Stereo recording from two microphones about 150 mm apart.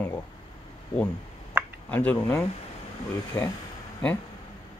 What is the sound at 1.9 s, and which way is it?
Speech, 10° left (ahead or behind).